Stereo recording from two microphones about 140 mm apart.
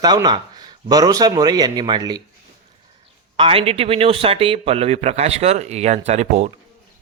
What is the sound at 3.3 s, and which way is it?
A man's voice, 40° right (ahead or behind).